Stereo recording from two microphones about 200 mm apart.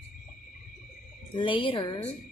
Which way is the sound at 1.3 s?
25° left (ahead or behind).